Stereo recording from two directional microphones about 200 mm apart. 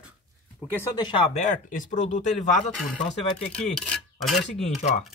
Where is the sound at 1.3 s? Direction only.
35° left (ahead or behind).